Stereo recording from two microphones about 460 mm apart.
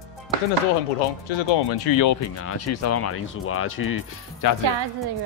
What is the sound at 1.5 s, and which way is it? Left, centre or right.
Speech, left.